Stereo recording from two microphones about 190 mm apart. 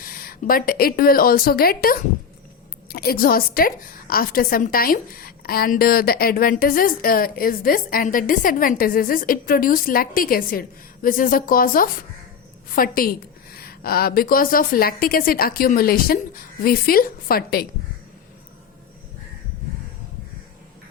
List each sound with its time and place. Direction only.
0.0 s a woman's voice: 50° left (ahead or behind)